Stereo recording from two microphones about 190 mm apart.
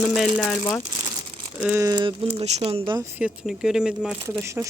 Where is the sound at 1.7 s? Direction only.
15° right (ahead or behind).